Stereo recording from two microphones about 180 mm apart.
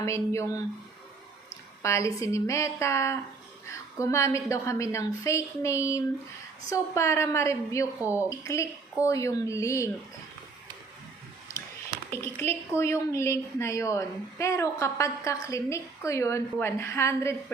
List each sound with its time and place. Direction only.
0.0 s a woman's voice: 15° left (ahead or behind)
1.8 s a woman's voice: 15° left (ahead or behind)
8.0 s a woman's voice: 10° right (ahead or behind)
8.4 s a woman's voice: 15° left (ahead or behind)
12.1 s a woman's voice: 15° left (ahead or behind)